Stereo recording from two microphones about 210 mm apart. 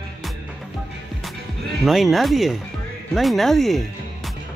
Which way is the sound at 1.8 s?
Centre (ahead or behind).